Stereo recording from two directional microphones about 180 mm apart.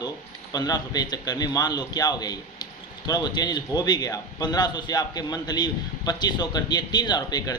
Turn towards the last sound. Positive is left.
turn(degrees=20)  # may be behind; listen again after turning